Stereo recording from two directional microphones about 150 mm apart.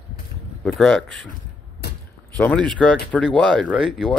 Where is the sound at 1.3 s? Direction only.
90° left.